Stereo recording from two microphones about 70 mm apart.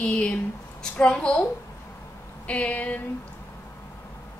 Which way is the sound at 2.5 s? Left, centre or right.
Centre.